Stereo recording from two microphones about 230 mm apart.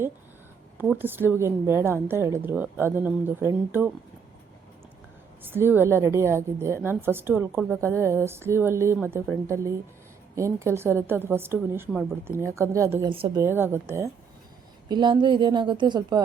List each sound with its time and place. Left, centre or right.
0.8 s a woman's voice: centre
5.4 s a woman's voice: centre
13.4 s a woman's voice: centre